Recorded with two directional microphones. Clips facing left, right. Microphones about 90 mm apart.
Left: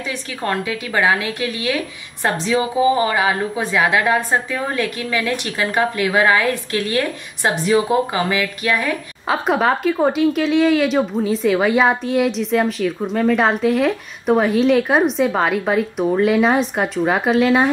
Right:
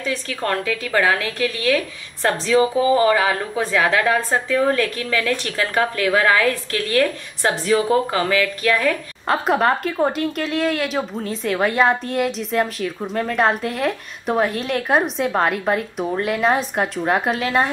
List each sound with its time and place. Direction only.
0.0 s a woman's voice: 20° left (ahead or behind)
9.3 s speech: centre (ahead or behind)